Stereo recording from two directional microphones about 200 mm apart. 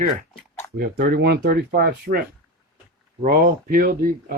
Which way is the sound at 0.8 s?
50° right (ahead or behind).